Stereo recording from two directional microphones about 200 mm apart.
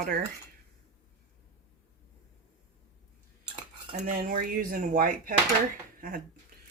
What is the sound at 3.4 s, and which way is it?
Cutlery, 35° right (ahead or behind).